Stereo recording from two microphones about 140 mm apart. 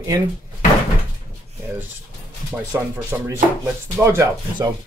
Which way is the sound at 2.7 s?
15° right (ahead or behind).